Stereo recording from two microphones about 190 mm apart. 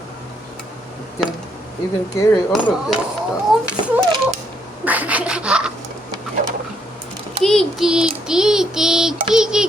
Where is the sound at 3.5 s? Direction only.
Centre (ahead or behind).